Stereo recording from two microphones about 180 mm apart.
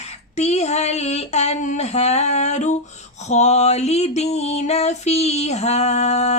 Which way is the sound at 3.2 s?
40° left (ahead or behind).